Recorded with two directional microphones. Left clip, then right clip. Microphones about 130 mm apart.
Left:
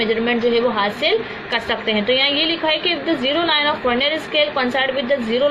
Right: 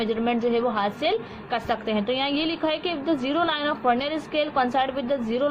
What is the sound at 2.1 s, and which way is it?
A woman's voice, 75° right (ahead or behind).